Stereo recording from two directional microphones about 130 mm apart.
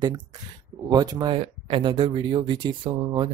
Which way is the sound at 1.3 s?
45° right (ahead or behind).